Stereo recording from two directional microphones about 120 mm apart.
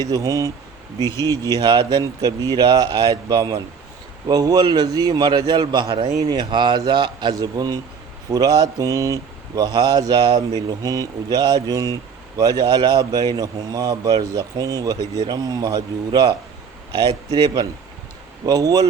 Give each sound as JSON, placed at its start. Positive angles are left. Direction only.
{"t": 0.0, "sound": "speech", "side_deg": -30}
{"t": 1.5, "sound": "speech", "side_deg": -35}